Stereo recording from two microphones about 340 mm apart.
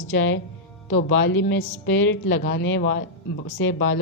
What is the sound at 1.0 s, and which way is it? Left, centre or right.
Speech, left.